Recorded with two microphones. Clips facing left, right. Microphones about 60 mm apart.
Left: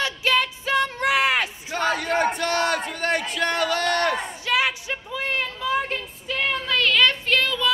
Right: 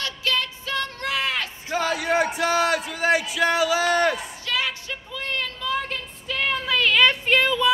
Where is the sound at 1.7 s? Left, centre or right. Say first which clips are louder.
Right 2 dB; centre.